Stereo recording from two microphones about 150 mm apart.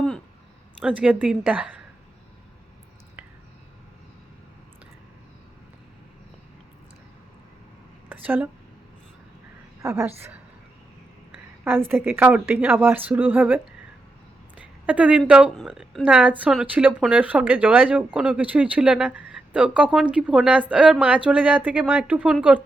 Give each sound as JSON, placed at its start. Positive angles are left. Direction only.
{"t": 0.8, "sound": "speech", "side_deg": -10}
{"t": 8.1, "sound": "a sound", "side_deg": -10}
{"t": 9.8, "sound": "a woman's voice", "side_deg": -20}
{"t": 11.9, "sound": "speech", "side_deg": -15}
{"t": 14.8, "sound": "speech", "side_deg": -10}